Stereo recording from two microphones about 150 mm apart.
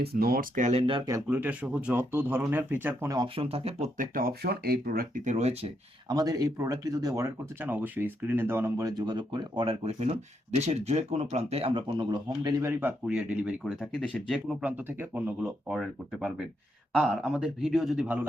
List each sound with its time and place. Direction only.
0.0 s speech: 90° right; by 1.0 s 40° right (ahead or behind)
1.0 s speech: 20° right (ahead or behind)
3.2 s speech: 40° right (ahead or behind)
3.9 s speech: 70° right (ahead or behind)
5.2 s speech: 50° right (ahead or behind)
6.1 s speech: 25° right (ahead or behind)
12.8 s a man's voice: 5° right (ahead or behind)